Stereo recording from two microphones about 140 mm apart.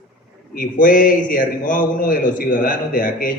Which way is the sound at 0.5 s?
85° left.